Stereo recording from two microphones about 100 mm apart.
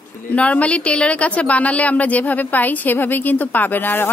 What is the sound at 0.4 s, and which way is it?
A woman's voice, 15° left (ahead or behind).